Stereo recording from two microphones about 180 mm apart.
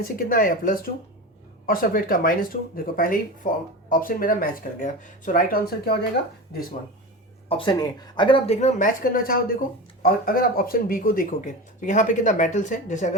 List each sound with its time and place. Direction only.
0.0 s speech: 55° left (ahead or behind)
7.4 s a woman's voice: 30° left (ahead or behind)